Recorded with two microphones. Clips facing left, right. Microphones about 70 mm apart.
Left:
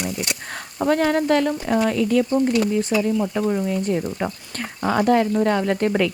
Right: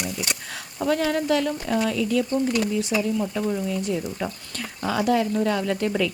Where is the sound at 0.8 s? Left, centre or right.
Left.